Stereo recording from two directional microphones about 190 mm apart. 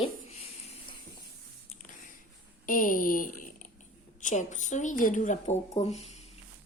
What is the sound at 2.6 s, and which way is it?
A woman's voice, 45° left (ahead or behind).